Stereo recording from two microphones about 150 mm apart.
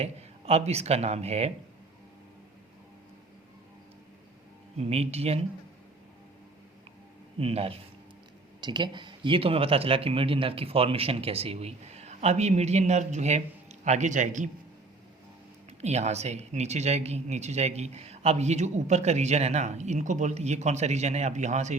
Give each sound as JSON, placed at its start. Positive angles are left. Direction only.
{"t": 0.0, "sound": "speech", "side_deg": -45}
{"t": 4.8, "sound": "speech", "side_deg": -45}
{"t": 7.3, "sound": "speech", "side_deg": -40}
{"t": 8.6, "sound": "speech", "side_deg": -30}
{"t": 15.8, "sound": "speech", "side_deg": -45}